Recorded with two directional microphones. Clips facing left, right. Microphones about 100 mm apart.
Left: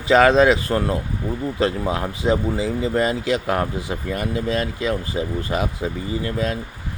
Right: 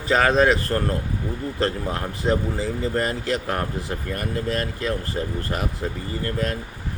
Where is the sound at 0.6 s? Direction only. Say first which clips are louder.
Left 2 dB; 10° left (ahead or behind).